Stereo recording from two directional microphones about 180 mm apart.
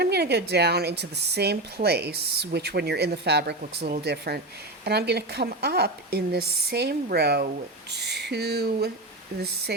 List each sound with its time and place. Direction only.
0.0 s speech: 65° right (ahead or behind)